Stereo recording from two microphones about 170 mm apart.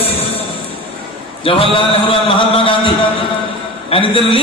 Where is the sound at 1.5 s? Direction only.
30° left (ahead or behind).